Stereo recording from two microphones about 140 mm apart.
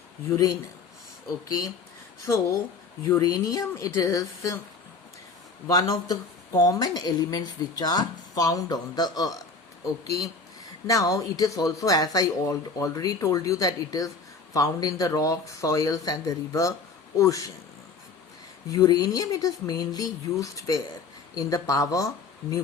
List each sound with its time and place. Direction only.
0.3 s speech: 25° left (ahead or behind)
5.6 s speech: 25° left (ahead or behind)
18.7 s speech: 25° left (ahead or behind)